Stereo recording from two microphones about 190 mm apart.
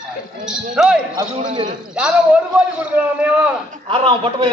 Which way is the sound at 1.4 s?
25° right (ahead or behind).